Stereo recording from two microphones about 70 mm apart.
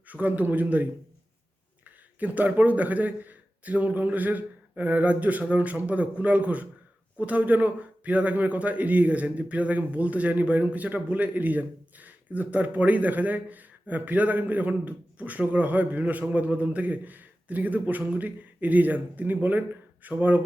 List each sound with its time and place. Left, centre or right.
0.1 s speech: right